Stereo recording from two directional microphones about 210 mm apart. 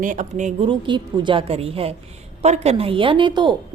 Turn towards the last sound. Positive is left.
turn(degrees=-20)  # may be behind; listen again after turning